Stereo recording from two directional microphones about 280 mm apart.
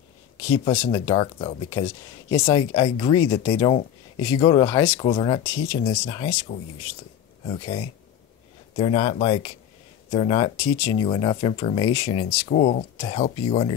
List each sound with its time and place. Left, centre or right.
0.9 s speech: centre